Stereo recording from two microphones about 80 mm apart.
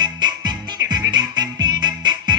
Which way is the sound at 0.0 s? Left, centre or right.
Right.